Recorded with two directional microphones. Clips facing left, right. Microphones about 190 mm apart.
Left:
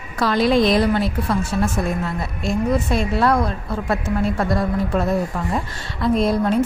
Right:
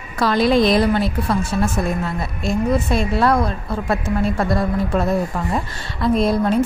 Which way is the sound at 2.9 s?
30° right (ahead or behind).